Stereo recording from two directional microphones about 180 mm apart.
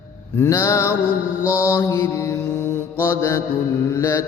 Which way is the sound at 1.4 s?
10° right (ahead or behind).